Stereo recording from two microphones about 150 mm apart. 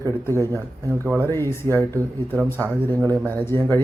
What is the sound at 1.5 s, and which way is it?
Speech, 15° left (ahead or behind).